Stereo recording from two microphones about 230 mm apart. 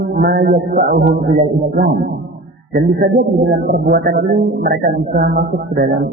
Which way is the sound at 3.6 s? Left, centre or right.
Right.